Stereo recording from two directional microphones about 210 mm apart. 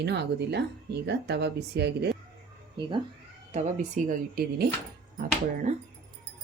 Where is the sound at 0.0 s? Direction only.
55° right (ahead or behind).